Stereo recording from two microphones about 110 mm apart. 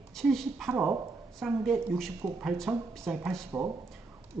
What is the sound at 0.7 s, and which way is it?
Speech, 20° right (ahead or behind).